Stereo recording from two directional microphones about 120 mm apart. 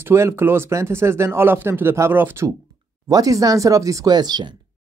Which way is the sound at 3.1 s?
30° right (ahead or behind).